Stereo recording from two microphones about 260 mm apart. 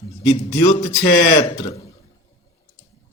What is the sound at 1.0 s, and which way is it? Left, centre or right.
Speech, left.